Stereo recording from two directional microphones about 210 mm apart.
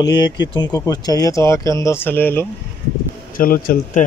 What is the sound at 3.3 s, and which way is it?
Speech, 45° left (ahead or behind).